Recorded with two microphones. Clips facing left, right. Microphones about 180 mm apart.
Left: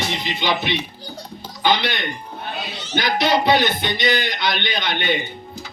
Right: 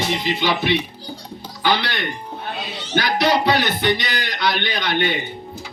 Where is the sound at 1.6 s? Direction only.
20° left (ahead or behind).